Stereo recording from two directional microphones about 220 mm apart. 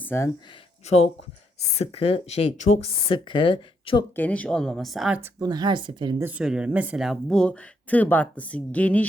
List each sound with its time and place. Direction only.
0.0 s speech: 10° left (ahead or behind)
0.9 s speech: 30° left (ahead or behind)
4.1 s speech: 5° left (ahead or behind)
5.4 s speech: 20° right (ahead or behind)
6.2 s speech: 5° right (ahead or behind)